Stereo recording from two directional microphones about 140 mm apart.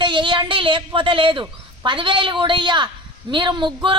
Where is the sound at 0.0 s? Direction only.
35° right (ahead or behind).